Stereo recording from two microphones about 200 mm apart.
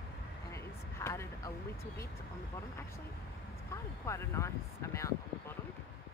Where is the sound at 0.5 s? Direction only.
15° left (ahead or behind).